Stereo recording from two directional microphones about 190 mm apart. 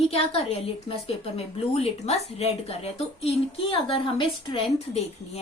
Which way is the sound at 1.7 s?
35° left (ahead or behind).